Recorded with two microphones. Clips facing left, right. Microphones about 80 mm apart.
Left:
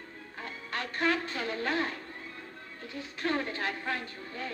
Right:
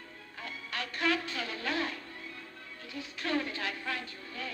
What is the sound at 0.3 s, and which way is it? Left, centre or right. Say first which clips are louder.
Speech: left 2 dB; left.